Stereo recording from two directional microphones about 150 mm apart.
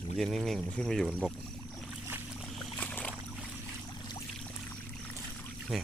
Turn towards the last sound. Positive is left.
turn(degrees=0)  # may be behind; listen again after turning